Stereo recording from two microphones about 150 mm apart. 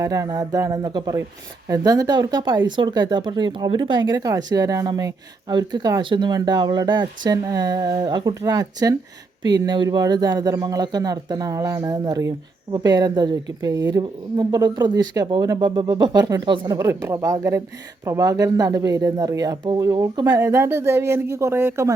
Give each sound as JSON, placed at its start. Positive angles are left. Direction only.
{"t": 0.0, "sound": "speech", "side_deg": -25}